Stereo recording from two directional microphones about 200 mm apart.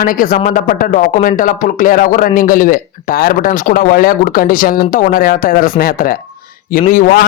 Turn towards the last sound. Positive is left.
turn(degrees=45)  # may be behind; listen again after turning